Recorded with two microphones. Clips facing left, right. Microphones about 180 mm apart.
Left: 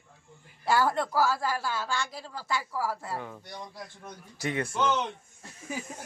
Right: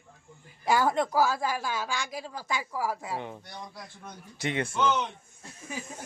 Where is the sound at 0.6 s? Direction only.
15° right (ahead or behind).